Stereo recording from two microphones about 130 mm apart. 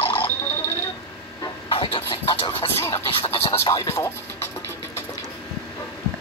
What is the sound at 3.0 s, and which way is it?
Music, 50° left (ahead or behind).